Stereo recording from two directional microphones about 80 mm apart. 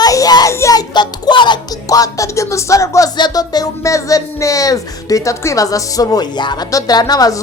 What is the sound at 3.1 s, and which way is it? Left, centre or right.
Speech, left.